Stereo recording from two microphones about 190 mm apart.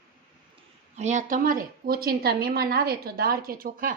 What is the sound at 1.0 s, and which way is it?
A woman's voice, 40° right (ahead or behind).